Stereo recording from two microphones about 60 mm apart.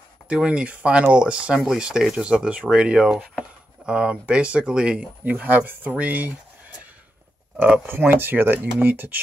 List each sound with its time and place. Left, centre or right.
0.3 s speech: centre
7.5 s speech: right